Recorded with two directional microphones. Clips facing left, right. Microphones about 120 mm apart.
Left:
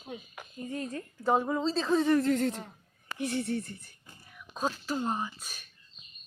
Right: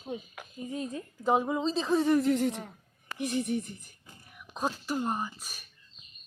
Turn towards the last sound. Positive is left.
turn(degrees=-5)  # may be behind; listen again after turning